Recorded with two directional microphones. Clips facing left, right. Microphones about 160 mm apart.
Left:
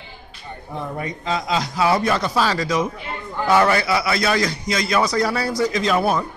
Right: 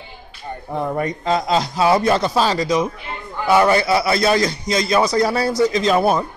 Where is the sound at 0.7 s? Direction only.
50° right (ahead or behind).